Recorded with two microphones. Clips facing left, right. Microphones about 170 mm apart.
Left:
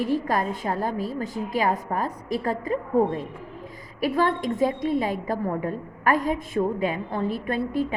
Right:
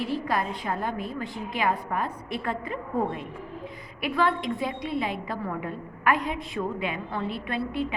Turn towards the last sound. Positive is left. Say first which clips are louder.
# left 4 dB
turn(degrees=45)  # may be behind; listen again after turning